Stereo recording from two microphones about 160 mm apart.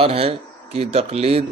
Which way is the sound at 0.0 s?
40° right (ahead or behind).